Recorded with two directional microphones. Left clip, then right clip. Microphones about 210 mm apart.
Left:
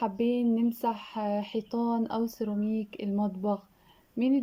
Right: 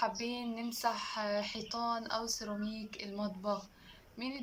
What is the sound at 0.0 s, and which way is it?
Speech, 50° left (ahead or behind).